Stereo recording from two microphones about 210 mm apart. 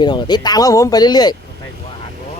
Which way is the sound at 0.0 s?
20° left (ahead or behind).